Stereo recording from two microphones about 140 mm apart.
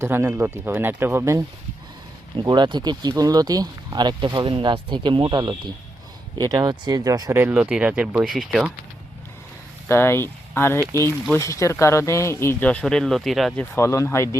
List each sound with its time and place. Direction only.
0.0 s speech: 20° right (ahead or behind)
2.4 s speech: 30° right (ahead or behind)
7.5 s speech: 5° right (ahead or behind)
9.9 s speech: 15° left (ahead or behind); by 13.5 s centre (ahead or behind)
13.6 s speech: 20° left (ahead or behind)